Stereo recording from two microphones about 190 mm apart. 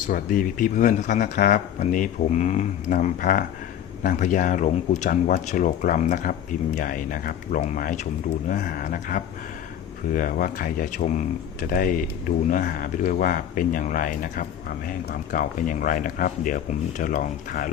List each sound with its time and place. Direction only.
0.1 s speech: 45° left (ahead or behind)